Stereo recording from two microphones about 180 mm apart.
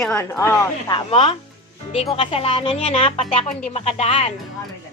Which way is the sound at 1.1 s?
30° left (ahead or behind).